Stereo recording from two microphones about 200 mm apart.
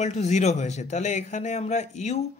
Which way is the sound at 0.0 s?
35° left (ahead or behind).